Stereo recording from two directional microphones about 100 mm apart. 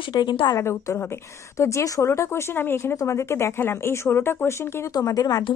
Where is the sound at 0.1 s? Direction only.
50° left (ahead or behind).